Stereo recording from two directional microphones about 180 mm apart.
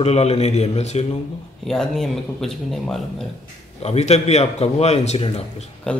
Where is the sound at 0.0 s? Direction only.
35° left (ahead or behind).